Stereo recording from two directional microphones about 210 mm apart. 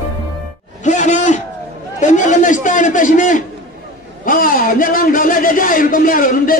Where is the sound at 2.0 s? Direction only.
35° left (ahead or behind).